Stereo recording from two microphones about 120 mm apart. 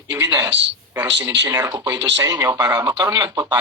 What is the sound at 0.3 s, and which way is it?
A man's voice, 30° right (ahead or behind).